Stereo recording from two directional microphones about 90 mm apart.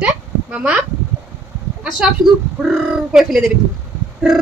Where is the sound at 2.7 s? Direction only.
5° right (ahead or behind).